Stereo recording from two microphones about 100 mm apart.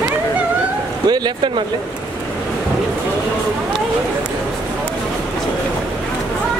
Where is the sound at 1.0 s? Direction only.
45° right (ahead or behind).